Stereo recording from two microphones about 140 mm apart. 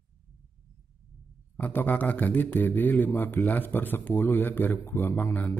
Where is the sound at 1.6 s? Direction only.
10° left (ahead or behind).